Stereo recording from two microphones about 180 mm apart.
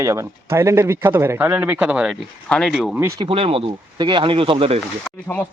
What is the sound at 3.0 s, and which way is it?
Speech, 15° right (ahead or behind).